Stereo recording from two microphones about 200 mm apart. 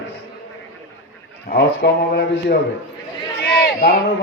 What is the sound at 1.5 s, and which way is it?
A man's voice, 55° left (ahead or behind).